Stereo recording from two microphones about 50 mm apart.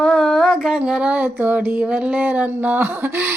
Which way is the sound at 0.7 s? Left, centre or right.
Centre.